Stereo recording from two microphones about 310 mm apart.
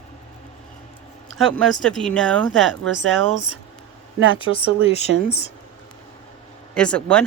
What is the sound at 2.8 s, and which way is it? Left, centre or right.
Speech, right.